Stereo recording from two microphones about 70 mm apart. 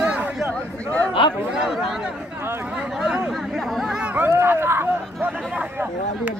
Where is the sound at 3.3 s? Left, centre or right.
Centre.